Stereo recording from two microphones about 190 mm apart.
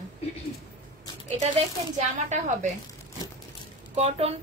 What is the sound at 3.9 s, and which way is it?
Speech, 35° right (ahead or behind).